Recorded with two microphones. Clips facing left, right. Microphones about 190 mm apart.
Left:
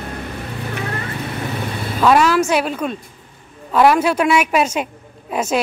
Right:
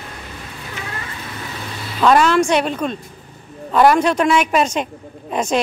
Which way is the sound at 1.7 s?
55° left (ahead or behind).